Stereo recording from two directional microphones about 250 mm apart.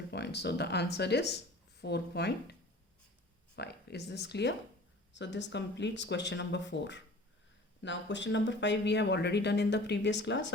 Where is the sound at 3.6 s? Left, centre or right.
Left.